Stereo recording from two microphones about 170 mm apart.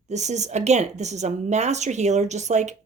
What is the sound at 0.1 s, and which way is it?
A woman's voice, 45° right (ahead or behind).